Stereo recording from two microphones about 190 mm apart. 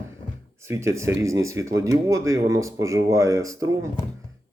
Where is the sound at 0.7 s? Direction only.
15° right (ahead or behind).